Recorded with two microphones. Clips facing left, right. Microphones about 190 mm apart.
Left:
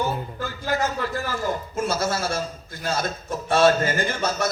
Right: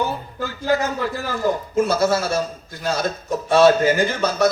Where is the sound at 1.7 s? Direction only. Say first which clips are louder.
Right 8 dB; 60° right (ahead or behind).